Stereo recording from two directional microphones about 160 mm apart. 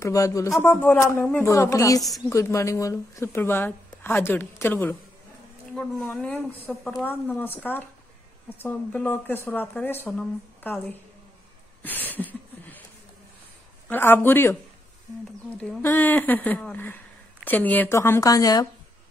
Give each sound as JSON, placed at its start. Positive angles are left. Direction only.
{"t": 0.0, "sound": "speech", "side_deg": 20}
{"t": 11.8, "sound": "a sound", "side_deg": 10}
{"t": 13.8, "sound": "speech", "side_deg": 15}